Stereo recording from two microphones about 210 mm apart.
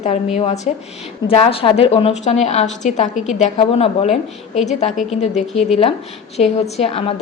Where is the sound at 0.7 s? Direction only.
35° left (ahead or behind).